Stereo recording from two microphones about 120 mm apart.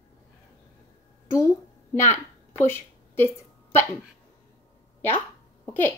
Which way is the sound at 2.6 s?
20° left (ahead or behind).